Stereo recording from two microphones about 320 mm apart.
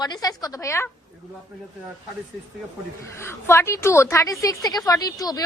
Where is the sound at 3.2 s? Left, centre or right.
Centre.